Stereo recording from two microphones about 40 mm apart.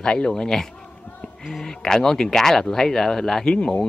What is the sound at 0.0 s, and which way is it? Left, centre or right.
Speech, left.